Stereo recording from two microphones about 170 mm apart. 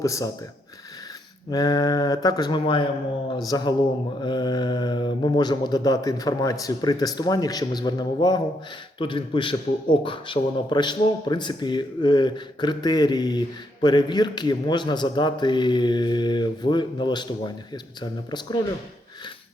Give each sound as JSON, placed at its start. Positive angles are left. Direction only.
{"t": 0.0, "sound": "a man's voice", "side_deg": 20}
{"t": 1.5, "sound": "a man's voice", "side_deg": 20}